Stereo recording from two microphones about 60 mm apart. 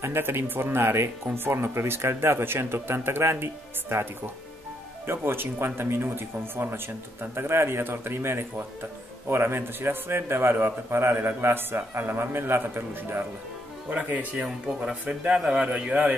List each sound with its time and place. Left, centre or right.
0.0 s a man's voice: right
5.0 s a man's voice: right
13.8 s a man's voice: right